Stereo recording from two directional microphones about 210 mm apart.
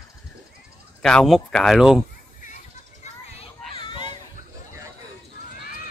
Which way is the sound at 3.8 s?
20° left (ahead or behind).